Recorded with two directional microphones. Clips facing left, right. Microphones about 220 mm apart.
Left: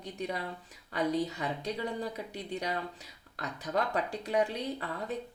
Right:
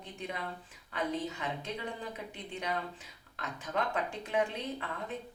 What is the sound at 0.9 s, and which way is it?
Speech, 40° left (ahead or behind).